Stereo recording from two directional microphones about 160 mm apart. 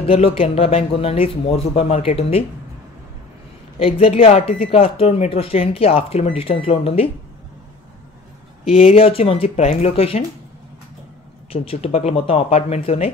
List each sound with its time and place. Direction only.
0.0 s speech: 40° left (ahead or behind)
3.8 s speech: 35° left (ahead or behind)
8.6 s speech: 35° left (ahead or behind)
11.5 s speech: 35° left (ahead or behind)